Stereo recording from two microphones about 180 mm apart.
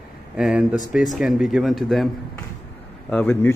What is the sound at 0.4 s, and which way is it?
Speech, 5° right (ahead or behind).